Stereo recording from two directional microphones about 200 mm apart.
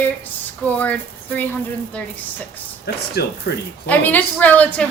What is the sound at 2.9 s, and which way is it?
Speech, 55° left (ahead or behind).